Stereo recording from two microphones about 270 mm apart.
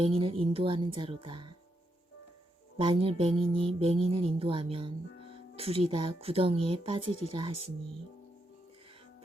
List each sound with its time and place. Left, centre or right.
0.0 s speech: right
2.7 s speech: centre